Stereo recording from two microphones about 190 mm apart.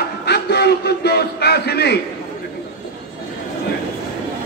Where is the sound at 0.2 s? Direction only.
60° left (ahead or behind).